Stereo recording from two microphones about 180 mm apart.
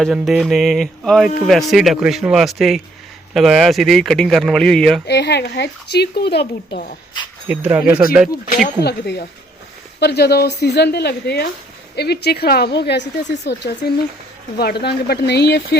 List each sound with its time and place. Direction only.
0.0 s speech: 5° right (ahead or behind)
5.0 s speech: 70° left (ahead or behind)
7.4 s speech: 10° right (ahead or behind)
8.6 s a woman's voice: 65° left (ahead or behind)